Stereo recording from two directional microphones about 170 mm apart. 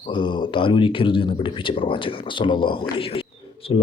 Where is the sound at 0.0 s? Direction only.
30° left (ahead or behind).